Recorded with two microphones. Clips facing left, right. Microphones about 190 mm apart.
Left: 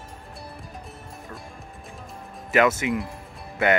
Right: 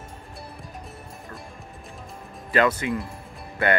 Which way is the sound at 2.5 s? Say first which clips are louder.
Left 1 dB; 20° left (ahead or behind).